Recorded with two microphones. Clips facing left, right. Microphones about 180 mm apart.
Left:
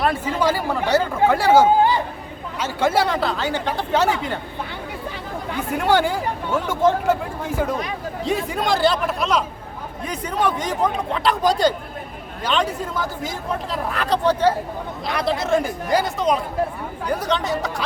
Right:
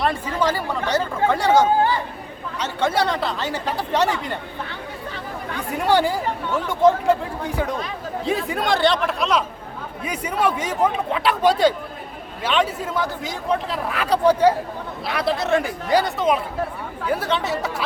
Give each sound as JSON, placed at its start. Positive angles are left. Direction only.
{"t": 0.0, "sound": "speech", "side_deg": 5}
{"t": 5.5, "sound": "speech", "side_deg": 0}
{"t": 8.2, "sound": "speech", "side_deg": 0}
{"t": 10.0, "sound": "speech", "side_deg": -10}